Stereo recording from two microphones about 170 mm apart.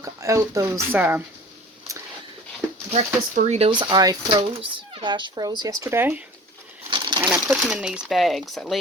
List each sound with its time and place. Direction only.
0.0 s speech: 20° right (ahead or behind)
2.9 s speech: 40° right (ahead or behind); by 6.2 s 15° right (ahead or behind)
6.9 s a sound: 25° right (ahead or behind)
7.2 s speech: 10° right (ahead or behind)